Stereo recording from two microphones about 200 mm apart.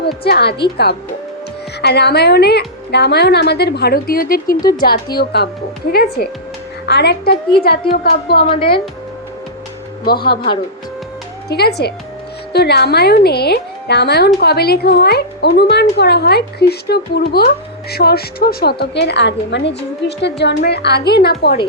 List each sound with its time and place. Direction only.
0.3 s a woman's voice: 55° left (ahead or behind)
8.4 s a woman's voice: 25° left (ahead or behind)
11.4 s a woman's voice: 55° left (ahead or behind)